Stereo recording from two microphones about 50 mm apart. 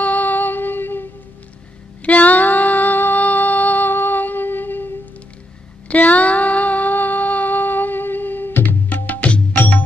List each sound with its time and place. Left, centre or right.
0.0 s music: left
2.0 s music: left
5.9 s a sound: left
8.8 s music: left